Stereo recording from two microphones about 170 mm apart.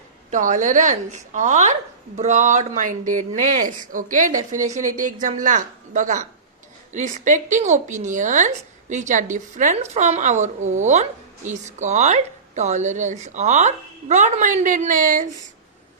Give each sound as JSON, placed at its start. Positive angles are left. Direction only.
{"t": 0.3, "sound": "a woman's voice", "side_deg": -50}